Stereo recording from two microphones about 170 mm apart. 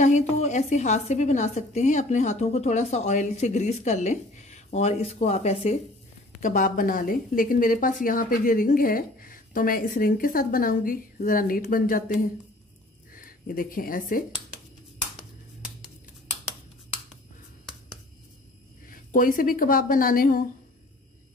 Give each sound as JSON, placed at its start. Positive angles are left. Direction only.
{"t": 0.0, "sound": "a woman's voice", "side_deg": 45}
{"t": 6.4, "sound": "speech", "side_deg": 50}
{"t": 13.1, "sound": "speech", "side_deg": 55}
{"t": 18.9, "sound": "speech", "side_deg": 55}